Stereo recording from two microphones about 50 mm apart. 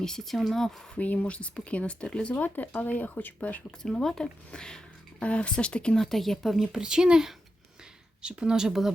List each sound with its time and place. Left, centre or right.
0.0 s speech: centre
0.9 s speech: left
2.3 s speech: left
3.8 s speech: centre
6.0 s speech: centre
6.7 s speech: centre